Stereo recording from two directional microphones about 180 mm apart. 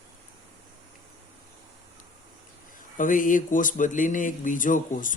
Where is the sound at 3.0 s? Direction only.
45° left (ahead or behind).